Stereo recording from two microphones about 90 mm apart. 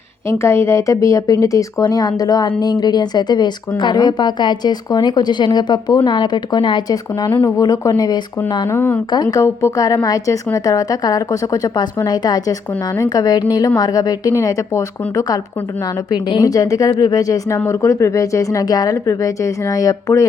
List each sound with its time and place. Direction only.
0.3 s speech: 30° left (ahead or behind)
8.4 s speech: 55° left (ahead or behind)
8.7 s speech: 25° left (ahead or behind)
9.1 s speech: 50° left (ahead or behind)
9.4 s speech: 35° left (ahead or behind)
16.4 s speech: 40° left (ahead or behind)